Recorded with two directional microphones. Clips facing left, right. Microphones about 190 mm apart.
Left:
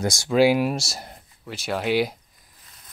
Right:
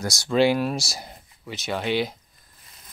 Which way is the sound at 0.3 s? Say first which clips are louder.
Left 2 dB; 5° left (ahead or behind).